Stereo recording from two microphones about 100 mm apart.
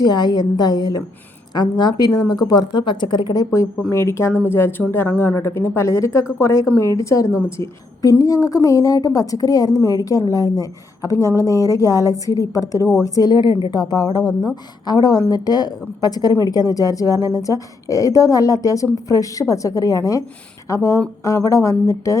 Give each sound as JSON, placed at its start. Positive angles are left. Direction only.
{"t": 0.0, "sound": "a woman's voice", "side_deg": 45}